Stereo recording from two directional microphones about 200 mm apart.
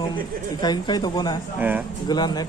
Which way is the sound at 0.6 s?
20° left (ahead or behind).